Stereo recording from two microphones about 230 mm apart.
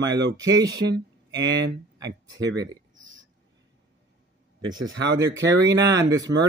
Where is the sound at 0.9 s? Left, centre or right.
Right.